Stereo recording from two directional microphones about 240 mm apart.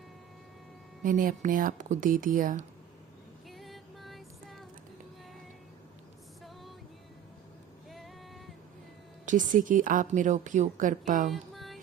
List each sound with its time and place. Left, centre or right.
1.0 s a woman's voice: right
3.5 s music: centre
7.9 s female singing: centre
9.2 s a woman's voice: right
11.3 s music: centre